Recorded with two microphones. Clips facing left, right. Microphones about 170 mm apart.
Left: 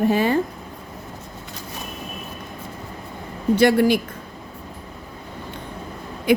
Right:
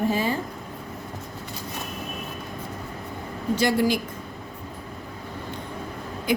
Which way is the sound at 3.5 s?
60° left (ahead or behind).